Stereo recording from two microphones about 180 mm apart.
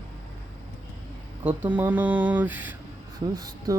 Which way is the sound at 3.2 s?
20° right (ahead or behind).